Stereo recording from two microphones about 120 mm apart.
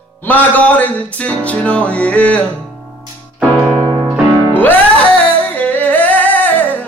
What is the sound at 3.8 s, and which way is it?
Piano, 30° right (ahead or behind).